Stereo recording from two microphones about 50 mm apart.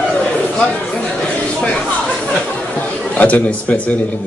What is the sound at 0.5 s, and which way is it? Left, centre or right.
Chatter, centre.